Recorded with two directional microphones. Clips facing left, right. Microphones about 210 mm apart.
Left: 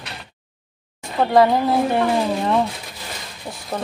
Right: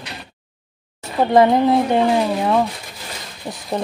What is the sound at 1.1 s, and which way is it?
Speech, 20° right (ahead or behind).